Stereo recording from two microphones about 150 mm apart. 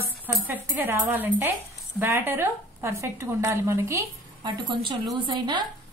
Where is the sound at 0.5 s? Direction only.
15° right (ahead or behind).